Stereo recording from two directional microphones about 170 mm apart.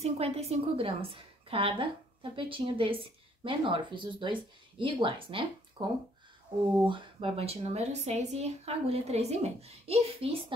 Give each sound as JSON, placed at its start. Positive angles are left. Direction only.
{"t": 0.0, "sound": "a woman's voice", "side_deg": -35}
{"t": 6.9, "sound": "a woman's voice", "side_deg": -30}